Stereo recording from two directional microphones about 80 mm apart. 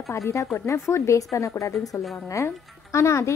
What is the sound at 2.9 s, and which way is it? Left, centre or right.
Speech, left.